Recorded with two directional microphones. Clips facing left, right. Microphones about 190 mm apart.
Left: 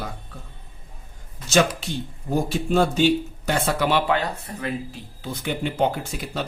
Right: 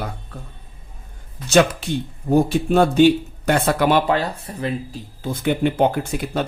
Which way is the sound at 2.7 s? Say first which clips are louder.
Right 4 dB; 55° right (ahead or behind).